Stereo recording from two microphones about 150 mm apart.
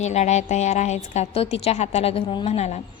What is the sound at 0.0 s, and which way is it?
A woman's voice, 50° left (ahead or behind).